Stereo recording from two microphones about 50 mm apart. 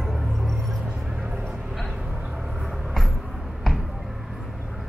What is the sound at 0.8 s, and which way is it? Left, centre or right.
Music, right.